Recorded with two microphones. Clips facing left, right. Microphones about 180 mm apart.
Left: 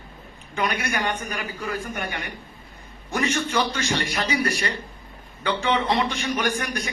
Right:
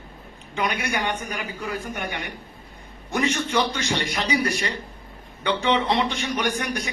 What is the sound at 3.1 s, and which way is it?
A man's voice, 20° right (ahead or behind).